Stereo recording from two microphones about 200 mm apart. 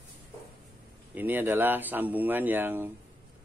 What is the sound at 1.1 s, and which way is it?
Speech, 10° right (ahead or behind).